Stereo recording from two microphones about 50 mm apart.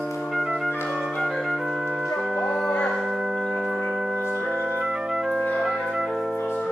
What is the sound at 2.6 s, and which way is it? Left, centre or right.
Music, centre.